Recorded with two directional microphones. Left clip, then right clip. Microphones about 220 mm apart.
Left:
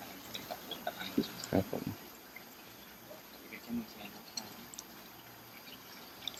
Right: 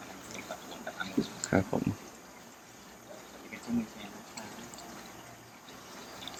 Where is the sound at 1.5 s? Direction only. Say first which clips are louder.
Right 4 dB; 5° right (ahead or behind).